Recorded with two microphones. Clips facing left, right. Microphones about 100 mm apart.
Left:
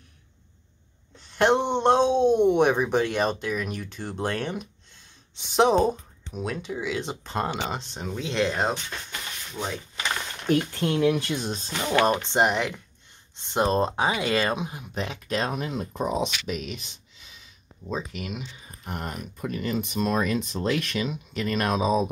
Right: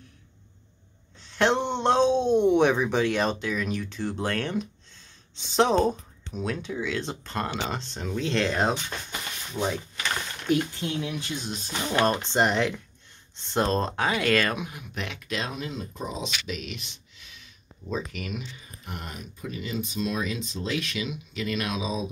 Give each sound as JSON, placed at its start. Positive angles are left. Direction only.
{"t": 1.2, "sound": "speech", "side_deg": 10}
{"t": 9.6, "sound": "speech", "side_deg": -20}
{"t": 10.5, "sound": "speech", "side_deg": 60}
{"t": 11.5, "sound": "speech", "side_deg": 25}
{"t": 12.3, "sound": "speech", "side_deg": 10}
{"t": 16.4, "sound": "speech", "side_deg": 45}
{"t": 17.8, "sound": "speech", "side_deg": 20}
{"t": 18.9, "sound": "speech", "side_deg": 45}